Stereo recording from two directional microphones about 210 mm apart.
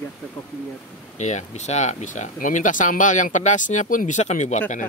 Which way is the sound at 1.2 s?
35° left (ahead or behind).